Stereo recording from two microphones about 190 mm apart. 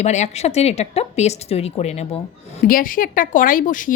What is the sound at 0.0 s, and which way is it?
Speech, 35° left (ahead or behind).